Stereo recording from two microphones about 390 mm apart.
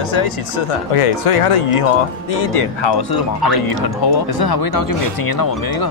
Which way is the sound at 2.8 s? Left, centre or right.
Left.